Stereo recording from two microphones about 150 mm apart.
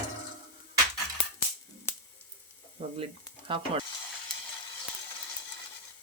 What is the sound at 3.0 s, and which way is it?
Sizzle, 35° right (ahead or behind).